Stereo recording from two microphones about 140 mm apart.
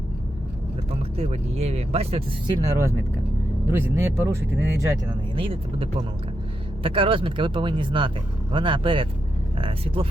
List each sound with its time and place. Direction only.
1.1 s speech: 45° right (ahead or behind)
2.6 s speech: 20° right (ahead or behind)
5.4 s speech: 40° right (ahead or behind)